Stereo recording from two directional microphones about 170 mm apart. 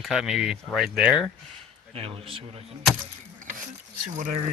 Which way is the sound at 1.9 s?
35° right (ahead or behind).